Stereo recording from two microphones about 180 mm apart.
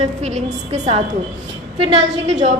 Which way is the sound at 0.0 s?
40° right (ahead or behind).